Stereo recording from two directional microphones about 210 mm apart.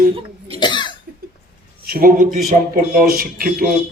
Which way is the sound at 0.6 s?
20° left (ahead or behind).